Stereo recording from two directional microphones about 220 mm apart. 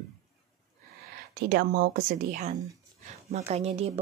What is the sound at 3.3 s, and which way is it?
Speech, 30° right (ahead or behind).